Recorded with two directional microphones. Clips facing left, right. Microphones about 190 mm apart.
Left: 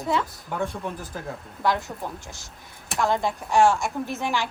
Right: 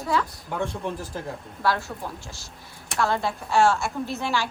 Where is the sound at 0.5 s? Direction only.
Centre (ahead or behind).